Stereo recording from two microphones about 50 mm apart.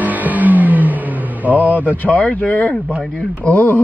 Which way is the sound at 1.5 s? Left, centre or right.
Left.